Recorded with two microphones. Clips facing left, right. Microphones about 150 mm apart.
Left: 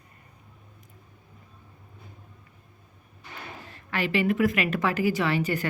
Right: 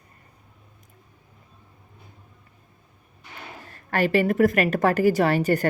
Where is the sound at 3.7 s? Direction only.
45° right (ahead or behind).